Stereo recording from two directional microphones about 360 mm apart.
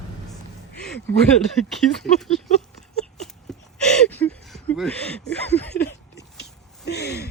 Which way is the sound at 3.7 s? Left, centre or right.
Centre.